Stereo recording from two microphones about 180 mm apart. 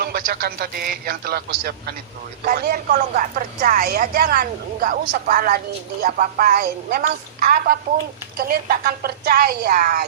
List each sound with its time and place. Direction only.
0.0 s a man's voice: 60° right (ahead or behind)